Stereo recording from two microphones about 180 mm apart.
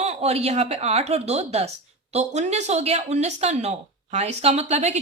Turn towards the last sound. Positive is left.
turn(degrees=-40)  # may be behind; listen again after turning